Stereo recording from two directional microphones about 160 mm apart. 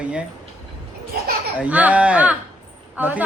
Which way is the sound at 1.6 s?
10° right (ahead or behind).